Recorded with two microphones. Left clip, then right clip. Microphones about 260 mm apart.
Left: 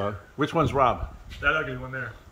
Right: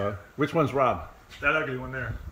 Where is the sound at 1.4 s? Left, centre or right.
Centre.